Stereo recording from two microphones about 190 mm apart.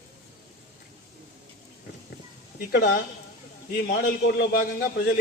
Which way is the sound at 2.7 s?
60° left (ahead or behind).